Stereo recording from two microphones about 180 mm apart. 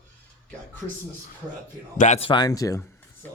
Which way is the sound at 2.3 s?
25° left (ahead or behind).